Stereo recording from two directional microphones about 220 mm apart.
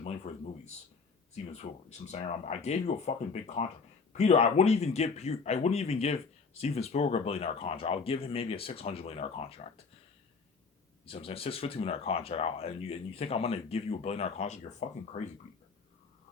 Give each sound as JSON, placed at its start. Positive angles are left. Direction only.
{"t": 0.0, "sound": "speech", "side_deg": 30}
{"t": 11.0, "sound": "speech", "side_deg": 25}